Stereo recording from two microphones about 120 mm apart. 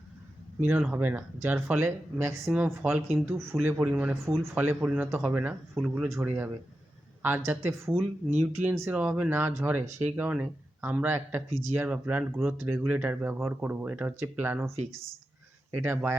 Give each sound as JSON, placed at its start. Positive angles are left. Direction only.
{"t": 0.6, "sound": "speech", "side_deg": -15}
{"t": 15.8, "sound": "speech", "side_deg": -20}